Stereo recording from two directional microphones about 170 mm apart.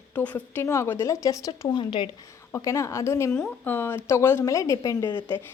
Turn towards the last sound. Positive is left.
turn(degrees=15)  # may be behind; listen again after turning